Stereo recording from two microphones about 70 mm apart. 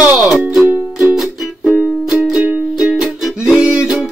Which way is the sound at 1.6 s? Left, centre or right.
Centre.